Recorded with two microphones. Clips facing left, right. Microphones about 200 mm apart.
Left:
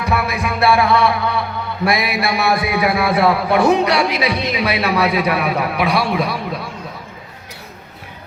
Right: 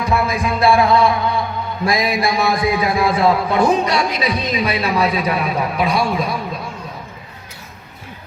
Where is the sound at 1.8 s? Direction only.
70° left (ahead or behind).